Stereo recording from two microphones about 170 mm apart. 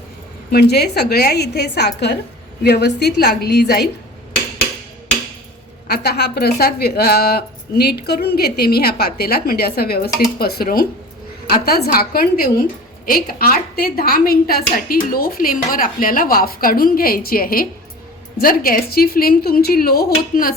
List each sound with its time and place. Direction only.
0.5 s a woman's voice: 70° left (ahead or behind)
5.9 s a woman's voice: 70° left (ahead or behind)